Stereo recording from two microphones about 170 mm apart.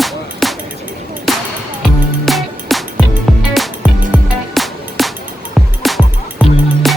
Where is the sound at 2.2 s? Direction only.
Centre (ahead or behind).